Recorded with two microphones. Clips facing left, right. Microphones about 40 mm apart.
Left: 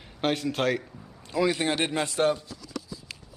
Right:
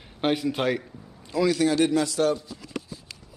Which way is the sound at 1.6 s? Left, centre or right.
Left.